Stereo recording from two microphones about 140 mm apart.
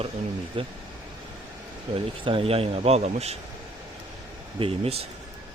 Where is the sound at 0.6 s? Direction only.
40° right (ahead or behind).